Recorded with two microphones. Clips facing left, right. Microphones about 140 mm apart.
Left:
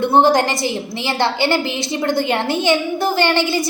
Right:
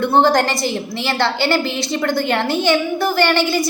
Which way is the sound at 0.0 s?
20° left (ahead or behind).